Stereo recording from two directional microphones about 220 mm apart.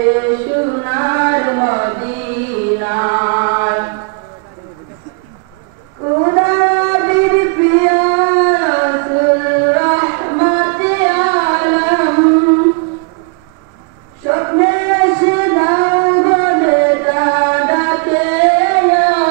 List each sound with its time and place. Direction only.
0.2 s a sound: 20° right (ahead or behind)
2.8 s music: 20° right (ahead or behind)
6.2 s singing: 20° right (ahead or behind)
14.3 s singing: 25° right (ahead or behind)